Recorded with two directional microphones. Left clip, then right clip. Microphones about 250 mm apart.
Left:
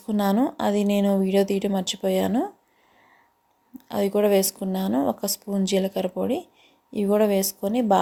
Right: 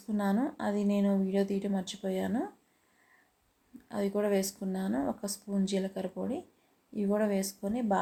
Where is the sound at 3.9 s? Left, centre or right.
Left.